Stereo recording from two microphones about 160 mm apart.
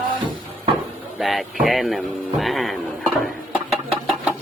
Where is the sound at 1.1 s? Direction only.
5° right (ahead or behind).